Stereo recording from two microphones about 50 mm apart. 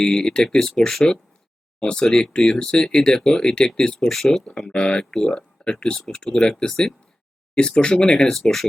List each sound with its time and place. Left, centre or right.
0.0 s speech: centre
4.5 s speech: centre
5.1 s speech: centre
8.3 s speech: centre